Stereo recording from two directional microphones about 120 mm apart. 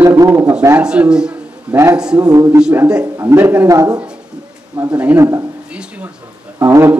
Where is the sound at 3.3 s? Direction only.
10° right (ahead or behind).